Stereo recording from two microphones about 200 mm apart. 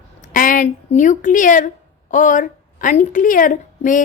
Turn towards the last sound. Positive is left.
turn(degrees=40)  # may be behind; listen again after turning